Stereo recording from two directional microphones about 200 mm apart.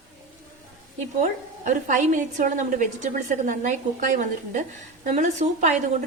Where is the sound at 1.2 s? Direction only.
40° right (ahead or behind).